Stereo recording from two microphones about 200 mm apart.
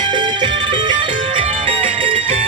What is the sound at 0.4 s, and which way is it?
Music, 25° right (ahead or behind).